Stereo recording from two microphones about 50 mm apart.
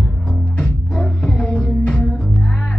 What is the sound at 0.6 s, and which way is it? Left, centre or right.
Music, left.